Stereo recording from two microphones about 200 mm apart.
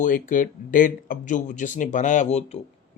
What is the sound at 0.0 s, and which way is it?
Mantra, 40° left (ahead or behind).